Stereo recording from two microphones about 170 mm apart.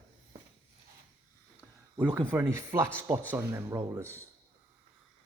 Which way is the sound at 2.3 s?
15° right (ahead or behind).